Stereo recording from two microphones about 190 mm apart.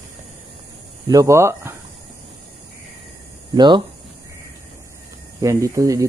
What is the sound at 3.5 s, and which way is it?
Speech, 25° right (ahead or behind).